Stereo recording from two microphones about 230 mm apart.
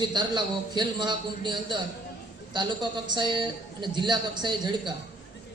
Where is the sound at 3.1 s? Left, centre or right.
Centre.